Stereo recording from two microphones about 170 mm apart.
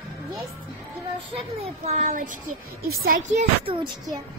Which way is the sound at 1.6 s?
45° right (ahead or behind).